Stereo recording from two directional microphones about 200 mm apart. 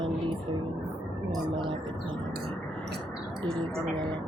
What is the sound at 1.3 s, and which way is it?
Speech, 25° right (ahead or behind).